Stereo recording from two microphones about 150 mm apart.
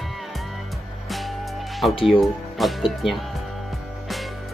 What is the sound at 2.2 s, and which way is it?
Speech, centre (ahead or behind).